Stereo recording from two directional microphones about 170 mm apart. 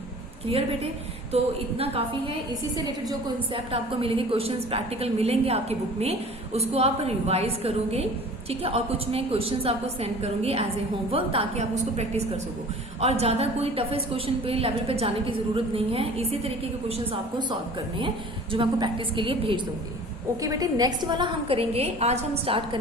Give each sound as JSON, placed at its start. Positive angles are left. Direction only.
{"t": 0.4, "sound": "a woman's voice", "side_deg": -35}
{"t": 2.7, "sound": "a woman's voice", "side_deg": -25}
{"t": 18.5, "sound": "a woman's voice", "side_deg": -30}
{"t": 20.4, "sound": "a woman's voice", "side_deg": -20}